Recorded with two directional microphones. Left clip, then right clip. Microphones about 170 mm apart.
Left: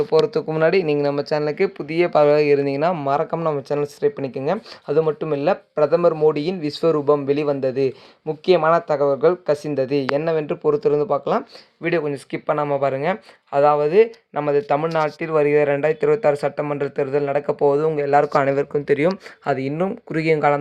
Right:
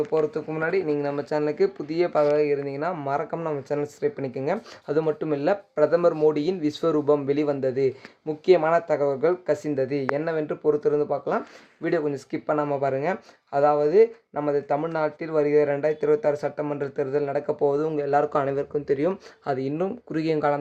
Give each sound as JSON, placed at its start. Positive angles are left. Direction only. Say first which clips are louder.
{"t": 0.1, "sound": "speech", "louder": "left 7 dB", "side_deg": 55}
{"t": 0.9, "sound": "speech", "louder": "left 5 dB", "side_deg": 35}
{"t": 2.1, "sound": "speech", "louder": "left 7 dB", "side_deg": 70}
{"t": 3.0, "sound": "speech", "louder": "left 7 dB", "side_deg": 35}
{"t": 11.8, "sound": "speech", "louder": "left 3 dB", "side_deg": 15}